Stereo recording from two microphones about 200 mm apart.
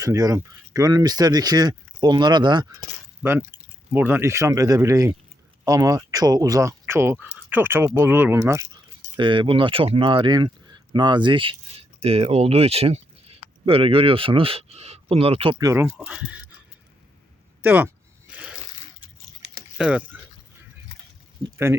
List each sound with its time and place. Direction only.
0.0 s speech: 15° right (ahead or behind)
3.2 s speech: 10° right (ahead or behind)
19.8 s speech: 5° right (ahead or behind)